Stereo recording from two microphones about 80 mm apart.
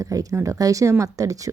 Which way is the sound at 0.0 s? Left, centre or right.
Right.